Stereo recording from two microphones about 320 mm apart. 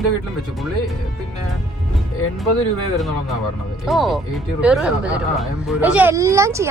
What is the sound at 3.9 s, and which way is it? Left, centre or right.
A child's voice, centre.